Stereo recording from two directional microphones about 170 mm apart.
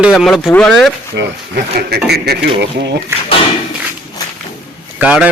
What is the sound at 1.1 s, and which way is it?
Speech, 75° right (ahead or behind).